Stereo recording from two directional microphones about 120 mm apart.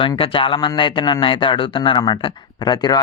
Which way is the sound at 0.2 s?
45° left (ahead or behind).